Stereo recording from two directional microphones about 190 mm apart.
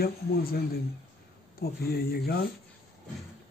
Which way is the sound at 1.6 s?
55° left (ahead or behind).